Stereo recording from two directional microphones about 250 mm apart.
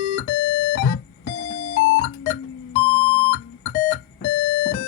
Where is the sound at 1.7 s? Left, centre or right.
Left.